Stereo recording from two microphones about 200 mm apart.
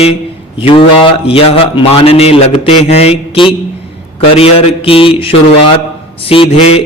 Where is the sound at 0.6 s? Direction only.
25° left (ahead or behind).